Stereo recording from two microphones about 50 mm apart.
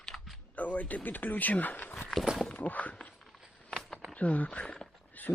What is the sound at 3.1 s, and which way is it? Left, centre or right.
Walk, centre.